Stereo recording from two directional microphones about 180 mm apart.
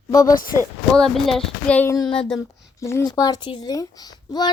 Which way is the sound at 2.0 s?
25° left (ahead or behind).